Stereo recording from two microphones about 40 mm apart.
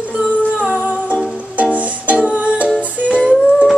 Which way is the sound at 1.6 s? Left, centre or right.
Right.